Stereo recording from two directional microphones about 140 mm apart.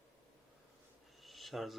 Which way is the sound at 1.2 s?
Centre (ahead or behind).